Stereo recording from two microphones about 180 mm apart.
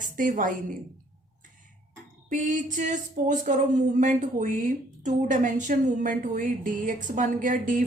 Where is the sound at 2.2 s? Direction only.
45° right (ahead or behind).